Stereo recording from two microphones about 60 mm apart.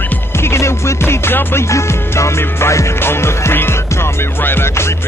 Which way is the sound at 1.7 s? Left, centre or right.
Left.